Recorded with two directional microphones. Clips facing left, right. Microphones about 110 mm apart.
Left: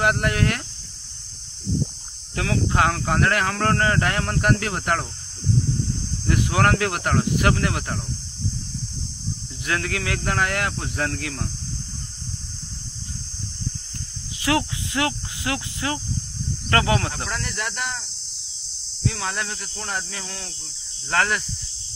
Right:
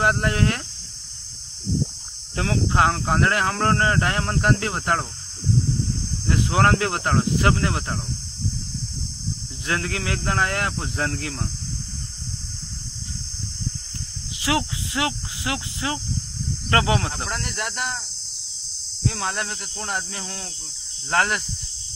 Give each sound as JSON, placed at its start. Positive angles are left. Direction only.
{"t": 0.0, "sound": "speech", "side_deg": -25}
{"t": 2.3, "sound": "speech", "side_deg": -25}
{"t": 6.2, "sound": "speech", "side_deg": -25}
{"t": 9.7, "sound": "speech", "side_deg": -25}
{"t": 14.4, "sound": "speech", "side_deg": -20}
{"t": 19.0, "sound": "speech", "side_deg": -30}